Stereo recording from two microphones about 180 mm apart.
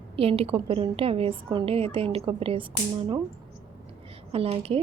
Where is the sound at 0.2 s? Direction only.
30° right (ahead or behind).